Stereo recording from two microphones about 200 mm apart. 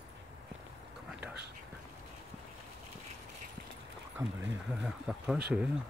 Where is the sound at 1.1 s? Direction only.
5° right (ahead or behind).